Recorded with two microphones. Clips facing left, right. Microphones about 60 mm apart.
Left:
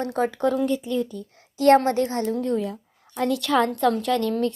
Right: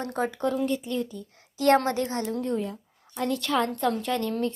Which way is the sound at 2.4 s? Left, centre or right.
Left.